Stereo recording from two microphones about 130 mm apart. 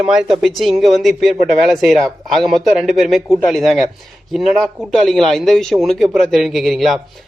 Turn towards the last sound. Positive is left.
turn(degrees=0)  # may be behind; listen again after turning